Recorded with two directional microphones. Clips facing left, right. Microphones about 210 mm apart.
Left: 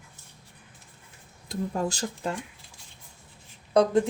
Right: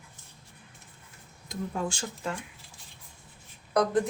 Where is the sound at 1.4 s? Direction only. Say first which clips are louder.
Left 4 dB; 40° left (ahead or behind).